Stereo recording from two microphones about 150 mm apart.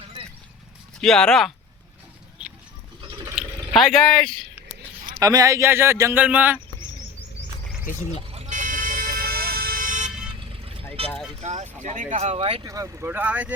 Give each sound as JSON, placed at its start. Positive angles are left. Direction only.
{"t": 1.0, "sound": "speech", "side_deg": 5}
{"t": 3.0, "sound": "water", "side_deg": -30}
{"t": 3.8, "sound": "speech", "side_deg": 0}
{"t": 5.0, "sound": "speech", "side_deg": -25}
{"t": 8.3, "sound": "vehicle", "side_deg": -40}
{"t": 8.5, "sound": "vehicle", "side_deg": -60}
{"t": 10.5, "sound": "vehicle", "side_deg": -40}
{"t": 11.4, "sound": "speech", "side_deg": -50}
{"t": 12.6, "sound": "speech", "side_deg": -20}